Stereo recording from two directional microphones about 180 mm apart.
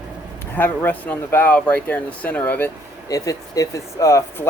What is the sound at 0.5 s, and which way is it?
Speech, 10° left (ahead or behind).